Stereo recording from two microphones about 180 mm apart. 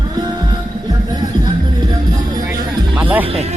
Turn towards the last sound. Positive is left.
turn(degrees=-10)  # may be behind; listen again after turning